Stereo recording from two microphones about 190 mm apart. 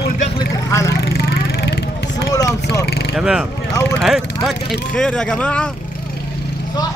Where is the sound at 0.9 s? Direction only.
55° left (ahead or behind).